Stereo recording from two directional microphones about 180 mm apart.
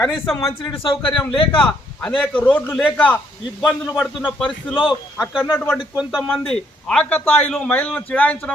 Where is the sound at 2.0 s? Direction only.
5° left (ahead or behind).